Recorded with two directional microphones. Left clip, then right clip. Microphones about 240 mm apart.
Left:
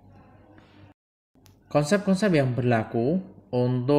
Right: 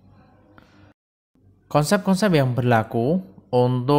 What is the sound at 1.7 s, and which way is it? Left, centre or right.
Speech, right.